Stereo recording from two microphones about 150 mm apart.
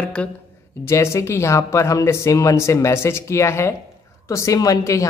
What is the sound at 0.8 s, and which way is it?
Speech, 20° left (ahead or behind).